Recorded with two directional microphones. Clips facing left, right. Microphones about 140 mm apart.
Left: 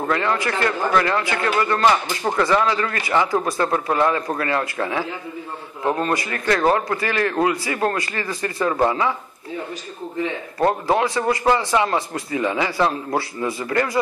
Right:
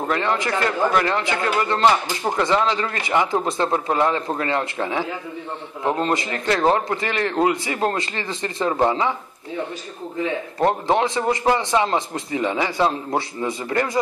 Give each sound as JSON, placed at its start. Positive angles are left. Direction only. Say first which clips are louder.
{"t": 0.0, "sound": "a man's voice", "louder": "left 1 dB", "side_deg": -20}
{"t": 10.6, "sound": "a man's voice", "louder": "even", "side_deg": -20}